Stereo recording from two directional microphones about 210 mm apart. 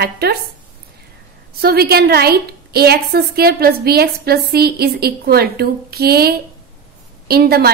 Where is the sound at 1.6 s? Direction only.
50° right (ahead or behind).